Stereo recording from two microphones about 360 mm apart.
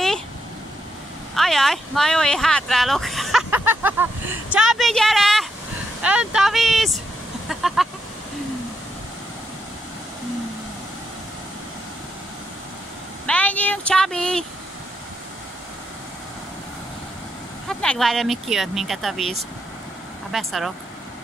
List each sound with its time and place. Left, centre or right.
1.3 s speech: centre
13.3 s speech: centre
17.6 s speech: centre